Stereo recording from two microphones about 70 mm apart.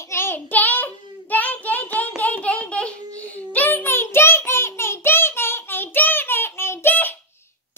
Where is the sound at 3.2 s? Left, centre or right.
Centre.